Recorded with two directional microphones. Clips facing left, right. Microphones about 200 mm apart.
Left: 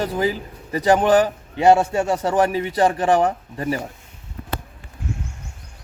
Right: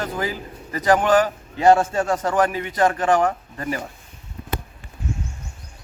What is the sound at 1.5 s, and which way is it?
A man's voice, 15° left (ahead or behind).